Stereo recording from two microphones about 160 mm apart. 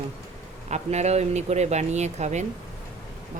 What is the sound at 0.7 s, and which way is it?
Speech, 45° right (ahead or behind).